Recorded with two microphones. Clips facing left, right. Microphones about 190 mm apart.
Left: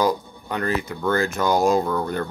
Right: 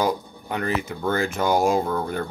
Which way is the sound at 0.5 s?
15° right (ahead or behind).